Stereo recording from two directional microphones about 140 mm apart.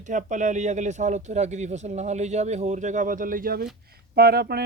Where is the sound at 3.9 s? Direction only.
90° right.